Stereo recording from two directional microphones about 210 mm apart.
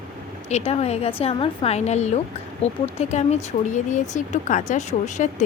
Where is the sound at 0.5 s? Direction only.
30° left (ahead or behind).